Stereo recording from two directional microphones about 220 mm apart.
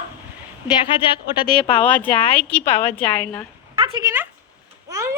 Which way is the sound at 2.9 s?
10° left (ahead or behind).